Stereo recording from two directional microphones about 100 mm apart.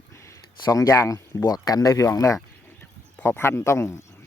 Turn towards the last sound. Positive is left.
turn(degrees=25)  # may be behind; listen again after turning